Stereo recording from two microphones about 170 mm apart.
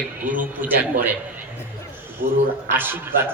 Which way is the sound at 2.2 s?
55° right (ahead or behind).